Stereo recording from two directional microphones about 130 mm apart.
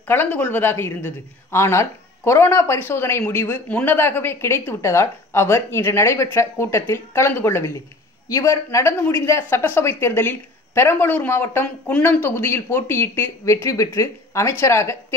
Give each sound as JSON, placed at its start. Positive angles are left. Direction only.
{"t": 0.1, "sound": "speech", "side_deg": 15}